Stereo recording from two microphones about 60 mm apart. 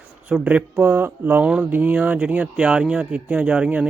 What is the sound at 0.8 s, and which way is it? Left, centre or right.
Speech, right.